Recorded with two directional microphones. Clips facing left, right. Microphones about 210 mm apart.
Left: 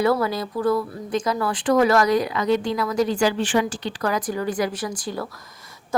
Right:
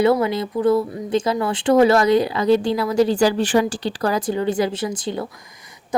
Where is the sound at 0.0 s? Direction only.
20° right (ahead or behind).